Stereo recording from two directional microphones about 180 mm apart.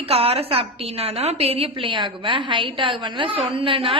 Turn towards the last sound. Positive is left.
turn(degrees=-30)  # may be behind; listen again after turning